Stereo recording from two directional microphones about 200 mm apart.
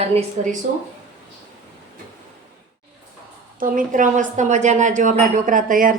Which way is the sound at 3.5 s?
45° right (ahead or behind).